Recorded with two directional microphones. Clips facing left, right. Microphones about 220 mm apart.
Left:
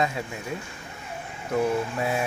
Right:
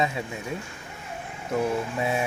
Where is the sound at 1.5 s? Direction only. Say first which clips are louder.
Left 1 dB; centre (ahead or behind).